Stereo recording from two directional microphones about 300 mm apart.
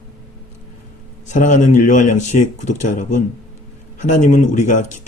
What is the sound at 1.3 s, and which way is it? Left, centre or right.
Speech, left.